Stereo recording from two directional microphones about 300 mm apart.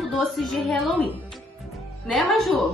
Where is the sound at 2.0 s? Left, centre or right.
Centre.